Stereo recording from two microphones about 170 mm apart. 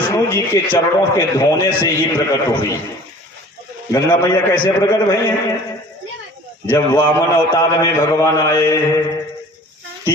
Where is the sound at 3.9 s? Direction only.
20° left (ahead or behind).